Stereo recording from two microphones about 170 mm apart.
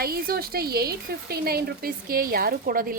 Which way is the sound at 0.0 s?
60° right (ahead or behind).